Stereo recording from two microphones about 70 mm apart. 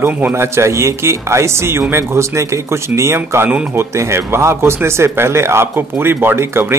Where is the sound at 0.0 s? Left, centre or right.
Right.